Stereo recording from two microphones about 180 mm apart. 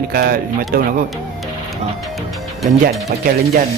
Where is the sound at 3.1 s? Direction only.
55° right (ahead or behind).